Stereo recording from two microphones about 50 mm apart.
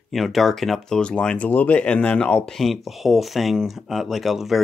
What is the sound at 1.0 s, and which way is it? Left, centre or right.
Speech, centre.